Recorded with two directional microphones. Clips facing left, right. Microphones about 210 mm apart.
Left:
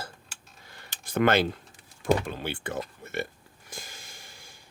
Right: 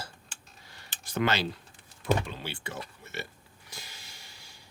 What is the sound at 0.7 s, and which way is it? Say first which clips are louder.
Tick-tock: left 5 dB; 55° left (ahead or behind).